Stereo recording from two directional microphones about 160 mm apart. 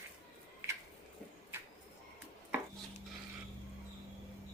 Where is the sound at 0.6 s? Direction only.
15° right (ahead or behind).